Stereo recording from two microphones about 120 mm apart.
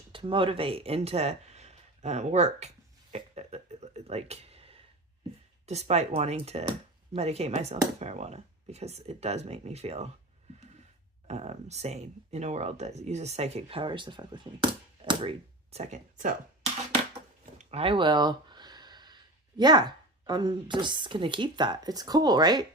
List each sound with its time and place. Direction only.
0.1 s speech: 45° right (ahead or behind); by 2.6 s 70° right (ahead or behind)
3.3 s a sound: 65° right (ahead or behind)
5.6 s speech: 65° right (ahead or behind)
11.3 s speech: 65° right (ahead or behind); by 16.3 s 85° right
17.4 s a sound: 60° right (ahead or behind); by 19.8 s 35° right (ahead or behind)
20.2 s a woman's voice: 35° right (ahead or behind)